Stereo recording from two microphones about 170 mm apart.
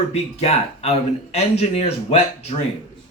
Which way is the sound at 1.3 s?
40° left (ahead or behind).